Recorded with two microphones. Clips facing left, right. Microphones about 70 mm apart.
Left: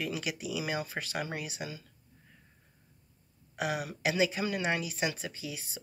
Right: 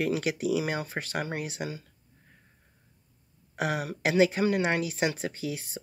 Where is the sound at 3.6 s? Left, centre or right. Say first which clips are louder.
Right 3 dB; right.